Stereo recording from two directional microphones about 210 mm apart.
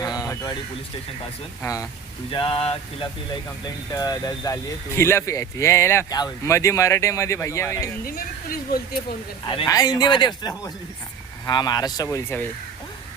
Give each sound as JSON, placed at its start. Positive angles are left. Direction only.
{"t": 0.0, "sound": "a sound", "side_deg": 15}
{"t": 1.6, "sound": "speech", "side_deg": 15}
{"t": 2.3, "sound": "speech", "side_deg": 25}
{"t": 8.0, "sound": "speech", "side_deg": 45}
{"t": 9.5, "sound": "speech", "side_deg": 20}